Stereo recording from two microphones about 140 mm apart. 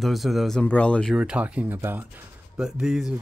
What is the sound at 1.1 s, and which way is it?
Speech, 5° right (ahead or behind).